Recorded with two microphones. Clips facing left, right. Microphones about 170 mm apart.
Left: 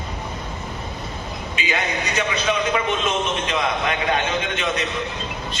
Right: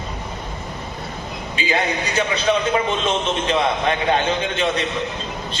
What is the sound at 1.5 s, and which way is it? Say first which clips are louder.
A man's voice: right 4 dB; 30° right (ahead or behind).